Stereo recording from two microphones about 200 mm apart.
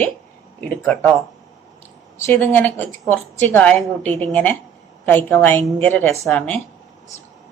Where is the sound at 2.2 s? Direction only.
10° left (ahead or behind).